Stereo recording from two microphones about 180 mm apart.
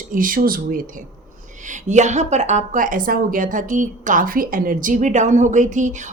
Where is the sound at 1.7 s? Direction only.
40° right (ahead or behind).